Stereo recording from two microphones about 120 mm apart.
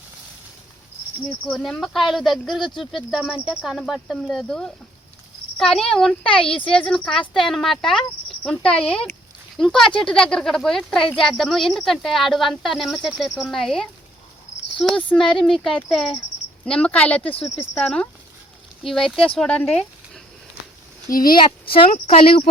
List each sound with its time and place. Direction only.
1.5 s speech: 5° left (ahead or behind)
21.2 s speech: 45° left (ahead or behind)
21.9 s speech: 60° left (ahead or behind)